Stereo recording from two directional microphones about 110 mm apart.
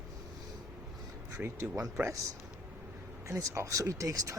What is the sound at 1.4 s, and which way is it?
Speech, 25° right (ahead or behind).